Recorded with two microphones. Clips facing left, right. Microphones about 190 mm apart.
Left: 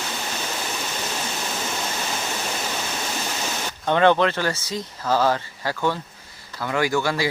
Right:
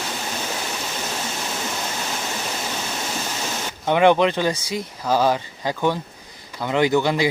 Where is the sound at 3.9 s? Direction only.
15° right (ahead or behind).